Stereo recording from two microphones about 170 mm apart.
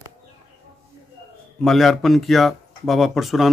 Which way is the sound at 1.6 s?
Centre (ahead or behind).